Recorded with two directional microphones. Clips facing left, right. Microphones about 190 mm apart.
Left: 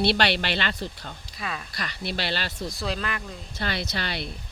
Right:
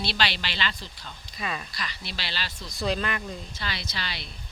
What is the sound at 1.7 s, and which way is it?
Speech, 55° left (ahead or behind).